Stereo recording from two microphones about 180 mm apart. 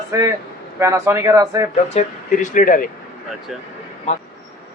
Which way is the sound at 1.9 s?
45° left (ahead or behind).